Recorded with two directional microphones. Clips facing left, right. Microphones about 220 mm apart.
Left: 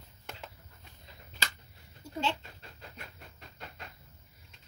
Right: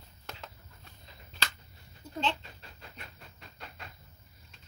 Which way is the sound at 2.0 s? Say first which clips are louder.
Left 1 dB; 10° left (ahead or behind).